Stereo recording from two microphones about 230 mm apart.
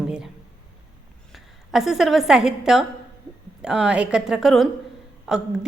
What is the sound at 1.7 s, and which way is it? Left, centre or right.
A woman's voice, centre.